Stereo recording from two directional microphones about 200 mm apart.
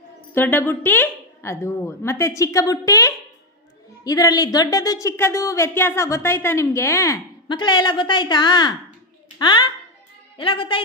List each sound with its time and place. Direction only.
0.3 s a woman's voice: 10° left (ahead or behind); by 10.8 s 25° left (ahead or behind)